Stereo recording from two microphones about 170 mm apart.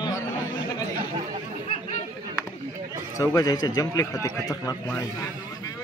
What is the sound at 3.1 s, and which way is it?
A man's voice, 20° left (ahead or behind).